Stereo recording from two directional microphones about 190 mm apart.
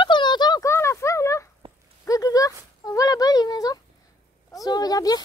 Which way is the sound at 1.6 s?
30° right (ahead or behind).